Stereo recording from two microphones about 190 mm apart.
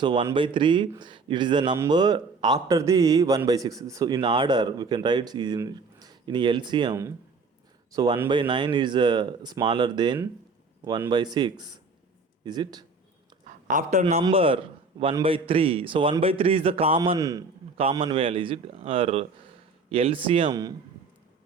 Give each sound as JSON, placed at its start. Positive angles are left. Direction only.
{"t": 0.0, "sound": "a man's voice", "side_deg": -25}
{"t": 13.7, "sound": "a man's voice", "side_deg": -45}
{"t": 14.0, "sound": "a man's voice", "side_deg": -30}
{"t": 17.7, "sound": "a man's voice", "side_deg": -30}